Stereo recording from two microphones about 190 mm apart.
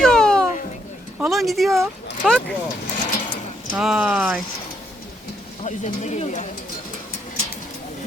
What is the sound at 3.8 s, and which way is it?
Speech, 5° right (ahead or behind).